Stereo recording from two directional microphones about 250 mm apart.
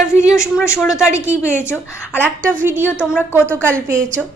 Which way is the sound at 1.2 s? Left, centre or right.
Centre.